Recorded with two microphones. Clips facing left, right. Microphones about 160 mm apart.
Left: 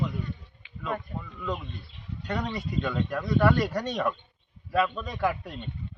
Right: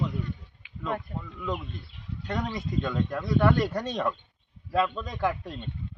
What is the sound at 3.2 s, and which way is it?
Speech, 5° left (ahead or behind).